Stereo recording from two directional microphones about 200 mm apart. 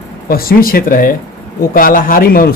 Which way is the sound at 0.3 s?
45° left (ahead or behind).